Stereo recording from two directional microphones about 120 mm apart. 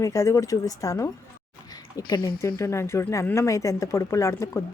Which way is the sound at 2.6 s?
25° left (ahead or behind).